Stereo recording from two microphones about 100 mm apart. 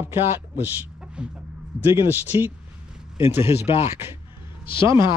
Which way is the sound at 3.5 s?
90° left.